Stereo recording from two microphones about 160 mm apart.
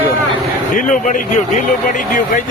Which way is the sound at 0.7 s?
50° left (ahead or behind).